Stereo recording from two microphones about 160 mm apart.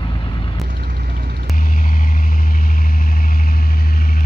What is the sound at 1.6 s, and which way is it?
Vehicle, 60° left (ahead or behind).